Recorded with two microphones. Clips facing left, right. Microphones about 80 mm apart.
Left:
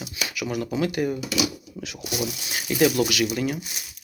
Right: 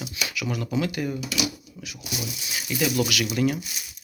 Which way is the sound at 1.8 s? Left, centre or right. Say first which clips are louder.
Left 5 dB; left.